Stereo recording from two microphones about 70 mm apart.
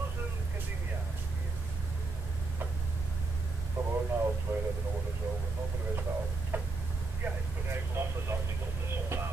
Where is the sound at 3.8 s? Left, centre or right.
Centre.